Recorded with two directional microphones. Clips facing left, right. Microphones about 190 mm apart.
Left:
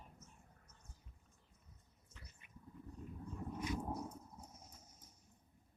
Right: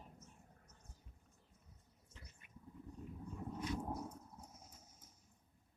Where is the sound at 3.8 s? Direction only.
Centre (ahead or behind).